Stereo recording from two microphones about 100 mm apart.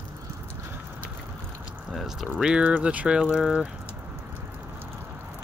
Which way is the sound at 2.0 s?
Centre (ahead or behind).